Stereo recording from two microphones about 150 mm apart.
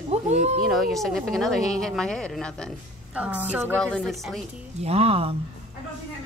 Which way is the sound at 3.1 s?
10° right (ahead or behind).